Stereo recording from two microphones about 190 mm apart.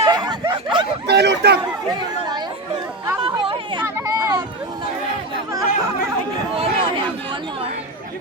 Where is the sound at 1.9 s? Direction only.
20° right (ahead or behind).